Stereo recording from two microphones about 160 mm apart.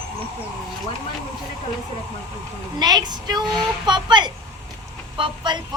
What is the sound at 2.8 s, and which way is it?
Speech, 25° right (ahead or behind).